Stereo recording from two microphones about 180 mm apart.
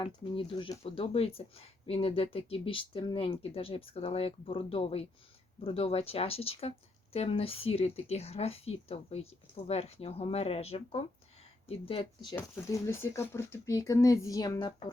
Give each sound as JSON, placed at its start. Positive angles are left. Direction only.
{"t": 0.0, "sound": "speech", "side_deg": 25}
{"t": 12.4, "sound": "speech", "side_deg": 15}